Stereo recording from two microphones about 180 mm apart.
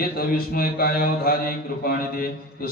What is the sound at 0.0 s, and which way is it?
A man's voice, 55° left (ahead or behind).